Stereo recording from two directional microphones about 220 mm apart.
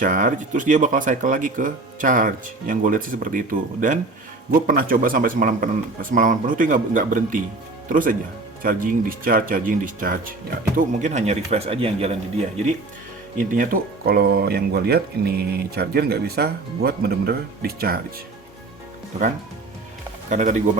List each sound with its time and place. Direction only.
0.0 s speech: 35° right (ahead or behind)
13.3 s speech: 40° right (ahead or behind)
20.3 s speech: 35° right (ahead or behind)